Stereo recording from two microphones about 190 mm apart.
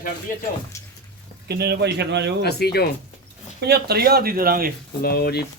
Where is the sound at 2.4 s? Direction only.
60° left (ahead or behind).